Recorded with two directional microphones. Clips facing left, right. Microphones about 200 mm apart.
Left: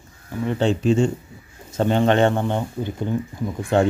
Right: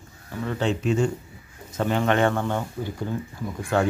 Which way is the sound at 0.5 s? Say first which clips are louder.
Left 4 dB; 30° left (ahead or behind).